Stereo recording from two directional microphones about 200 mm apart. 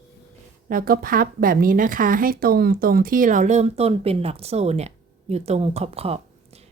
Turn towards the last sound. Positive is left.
turn(degrees=-30)  # may be behind; listen again after turning